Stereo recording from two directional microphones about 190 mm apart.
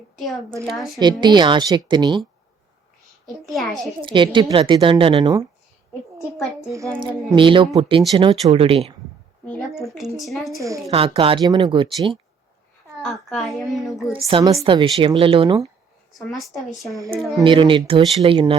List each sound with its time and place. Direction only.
0.2 s a woman's voice: centre (ahead or behind)
1.2 s a woman's voice: 25° right (ahead or behind)
3.2 s a woman's voice: centre (ahead or behind)
4.0 s a woman's voice: 25° right (ahead or behind)
7.0 s a woman's voice: 25° right (ahead or behind)
9.7 s a woman's voice: centre (ahead or behind)
10.6 s a woman's voice: 15° right (ahead or behind)
10.9 s a woman's voice: 30° right (ahead or behind)
13.0 s a woman's voice: centre (ahead or behind)
14.3 s a woman's voice: 25° right (ahead or behind)
16.4 s a woman's voice: centre (ahead or behind)
17.3 s a woman's voice: 25° right (ahead or behind)